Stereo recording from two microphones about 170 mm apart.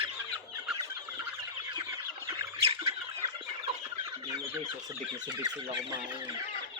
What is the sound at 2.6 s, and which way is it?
Chicken, 35° right (ahead or behind).